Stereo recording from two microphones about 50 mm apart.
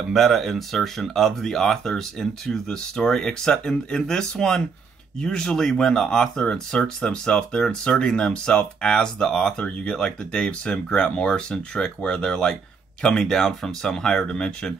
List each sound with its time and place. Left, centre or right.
0.1 s speech: centre